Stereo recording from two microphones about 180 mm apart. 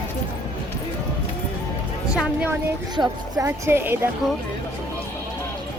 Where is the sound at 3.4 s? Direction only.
15° right (ahead or behind).